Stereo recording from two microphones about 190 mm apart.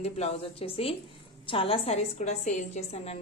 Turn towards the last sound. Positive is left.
turn(degrees=35)  # may be behind; listen again after turning